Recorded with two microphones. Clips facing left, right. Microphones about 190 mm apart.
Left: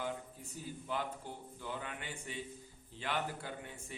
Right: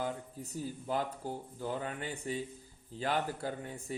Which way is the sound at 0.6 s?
40° right (ahead or behind).